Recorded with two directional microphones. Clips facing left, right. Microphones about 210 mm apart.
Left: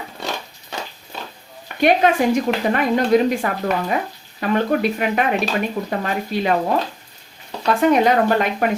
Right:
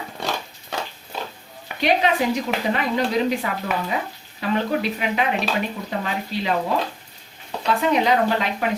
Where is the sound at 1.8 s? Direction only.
50° left (ahead or behind).